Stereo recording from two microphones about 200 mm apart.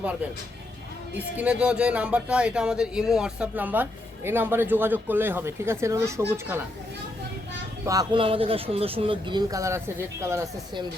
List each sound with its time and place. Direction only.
1.4 s a man's voice: 5° right (ahead or behind)
7.9 s speech: 20° right (ahead or behind)